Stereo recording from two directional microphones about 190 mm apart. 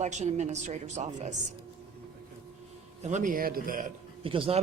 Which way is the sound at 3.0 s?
40° right (ahead or behind).